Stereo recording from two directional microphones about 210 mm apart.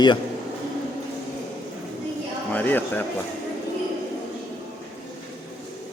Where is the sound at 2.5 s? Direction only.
10° left (ahead or behind).